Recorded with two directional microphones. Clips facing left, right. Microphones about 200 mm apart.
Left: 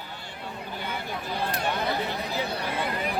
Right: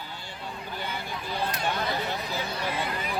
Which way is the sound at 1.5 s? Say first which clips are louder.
Left 4 dB; 55° left (ahead or behind).